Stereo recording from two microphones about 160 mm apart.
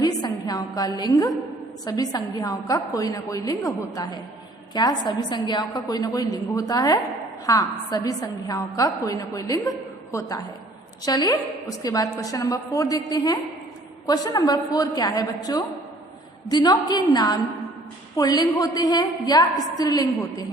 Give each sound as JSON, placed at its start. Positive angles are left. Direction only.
{"t": 0.0, "sound": "music", "side_deg": 25}
{"t": 1.8, "sound": "a woman's voice", "side_deg": 25}